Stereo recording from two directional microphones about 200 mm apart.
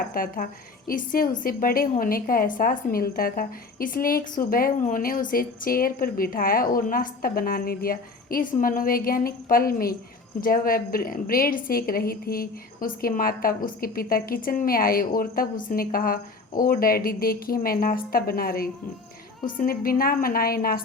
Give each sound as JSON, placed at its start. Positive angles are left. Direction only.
{"t": 0.1, "sound": "a woman's voice", "side_deg": 45}